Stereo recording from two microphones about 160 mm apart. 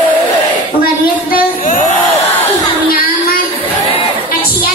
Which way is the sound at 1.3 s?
55° left (ahead or behind).